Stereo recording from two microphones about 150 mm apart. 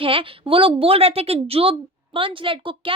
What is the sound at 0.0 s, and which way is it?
A woman's voice, 35° right (ahead or behind).